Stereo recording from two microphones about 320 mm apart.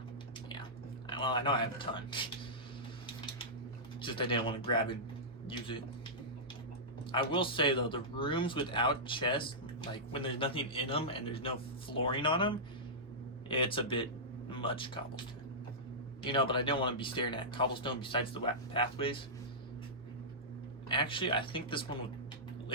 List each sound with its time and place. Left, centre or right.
1.1 s speech: centre
4.0 s speech: centre
7.1 s speech: centre
16.2 s speech: centre
20.8 s speech: centre